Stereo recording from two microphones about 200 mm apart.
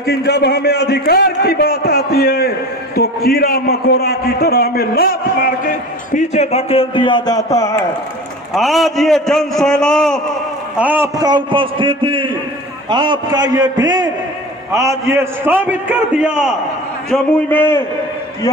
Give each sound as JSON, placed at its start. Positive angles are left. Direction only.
{"t": 0.0, "sound": "a man's voice", "side_deg": 50}
{"t": 8.5, "sound": "a man's voice", "side_deg": 0}
{"t": 10.8, "sound": "a man's voice", "side_deg": -10}
{"t": 11.1, "sound": "a man's voice", "side_deg": -20}
{"t": 17.1, "sound": "a man's voice", "side_deg": 10}